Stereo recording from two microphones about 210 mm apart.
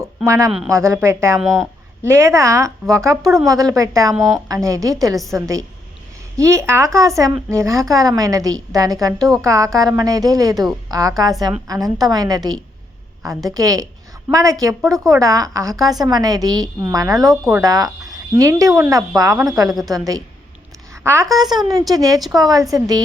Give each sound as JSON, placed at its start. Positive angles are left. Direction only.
{"t": 0.2, "sound": "a woman's voice", "side_deg": -15}
{"t": 9.1, "sound": "speech", "side_deg": 0}
{"t": 9.4, "sound": "a woman's voice", "side_deg": -15}